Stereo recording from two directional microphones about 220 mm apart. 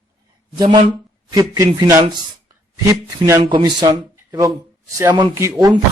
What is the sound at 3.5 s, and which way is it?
A man's voice, 20° right (ahead or behind).